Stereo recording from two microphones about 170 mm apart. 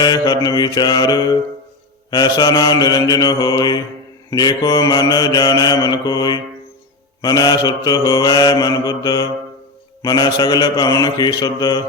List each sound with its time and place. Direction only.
0.0 s mantra: 25° left (ahead or behind)